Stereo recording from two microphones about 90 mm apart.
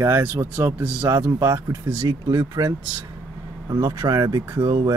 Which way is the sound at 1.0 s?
40° right (ahead or behind).